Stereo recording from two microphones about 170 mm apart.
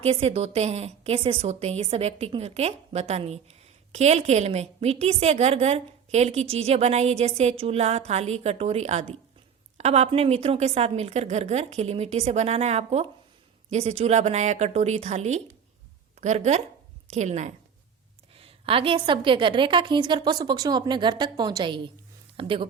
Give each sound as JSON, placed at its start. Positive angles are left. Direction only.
{"t": 0.0, "sound": "a woman's voice", "side_deg": -35}